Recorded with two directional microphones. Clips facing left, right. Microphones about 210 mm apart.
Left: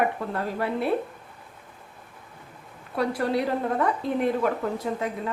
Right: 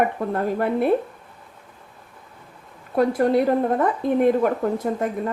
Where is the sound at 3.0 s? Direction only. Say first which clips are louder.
Right 7 dB; 50° right (ahead or behind).